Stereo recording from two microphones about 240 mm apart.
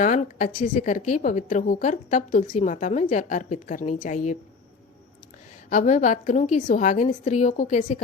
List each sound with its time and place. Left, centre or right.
0.0 s a woman's voice: left
5.6 s a woman's voice: left